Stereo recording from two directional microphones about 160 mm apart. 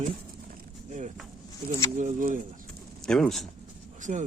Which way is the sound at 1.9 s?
55° right (ahead or behind).